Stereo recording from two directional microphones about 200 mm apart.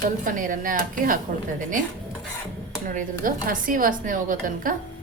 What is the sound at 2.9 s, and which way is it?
Speech, 45° right (ahead or behind).